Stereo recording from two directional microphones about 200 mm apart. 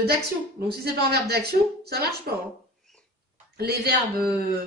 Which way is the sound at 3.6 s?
55° right (ahead or behind).